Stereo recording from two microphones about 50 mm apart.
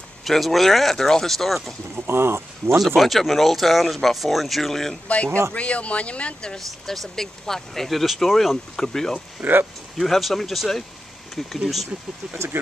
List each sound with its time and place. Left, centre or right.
0.2 s speech: centre
2.0 s speech: right
3.0 s speech: centre
5.0 s speech: left
6.9 s speech: centre
9.4 s speech: right
9.9 s speech: centre